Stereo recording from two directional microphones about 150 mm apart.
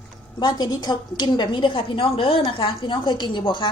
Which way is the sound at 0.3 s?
30° left (ahead or behind).